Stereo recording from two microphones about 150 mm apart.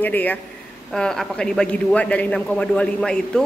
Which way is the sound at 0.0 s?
10° left (ahead or behind).